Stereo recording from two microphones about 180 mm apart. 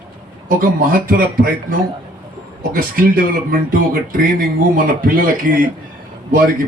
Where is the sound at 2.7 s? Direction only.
55° right (ahead or behind).